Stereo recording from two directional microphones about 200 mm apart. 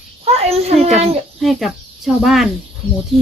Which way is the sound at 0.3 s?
30° right (ahead or behind).